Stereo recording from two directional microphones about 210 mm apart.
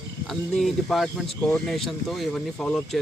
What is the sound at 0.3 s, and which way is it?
Speech, centre (ahead or behind).